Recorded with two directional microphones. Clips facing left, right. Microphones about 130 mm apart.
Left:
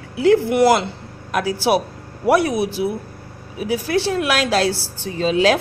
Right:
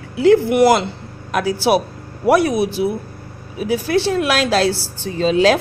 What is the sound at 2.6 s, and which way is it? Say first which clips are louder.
Speech: right 2 dB; 25° right (ahead or behind).